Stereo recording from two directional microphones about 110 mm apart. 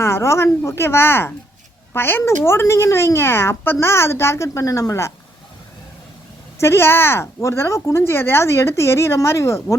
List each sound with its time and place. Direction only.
0.0 s speech: 25° left (ahead or behind)
6.6 s speech: 25° left (ahead or behind)